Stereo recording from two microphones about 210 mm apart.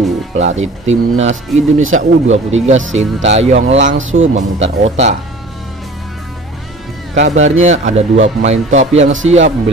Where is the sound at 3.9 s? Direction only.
65° right (ahead or behind).